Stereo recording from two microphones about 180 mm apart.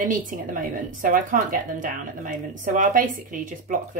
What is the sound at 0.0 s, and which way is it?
A woman's voice, 45° right (ahead or behind).